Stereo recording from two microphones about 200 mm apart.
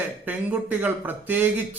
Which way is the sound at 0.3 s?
10° right (ahead or behind).